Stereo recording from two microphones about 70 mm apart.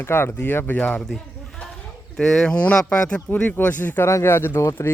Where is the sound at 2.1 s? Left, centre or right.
Centre; by 4.0 s left.